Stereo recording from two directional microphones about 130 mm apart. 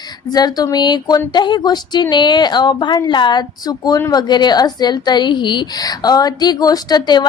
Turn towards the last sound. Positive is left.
turn(degrees=35)  # may be behind; listen again after turning